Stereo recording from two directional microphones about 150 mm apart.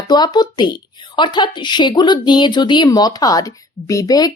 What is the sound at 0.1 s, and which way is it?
A woman's voice, 30° left (ahead or behind).